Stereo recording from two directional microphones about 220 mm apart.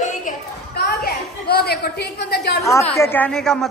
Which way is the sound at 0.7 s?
45° left (ahead or behind).